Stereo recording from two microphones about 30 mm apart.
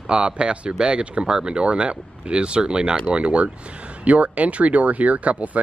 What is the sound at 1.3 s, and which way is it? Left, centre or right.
Speech, right.